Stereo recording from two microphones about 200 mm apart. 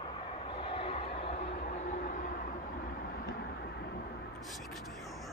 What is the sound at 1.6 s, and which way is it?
Train, 40° left (ahead or behind).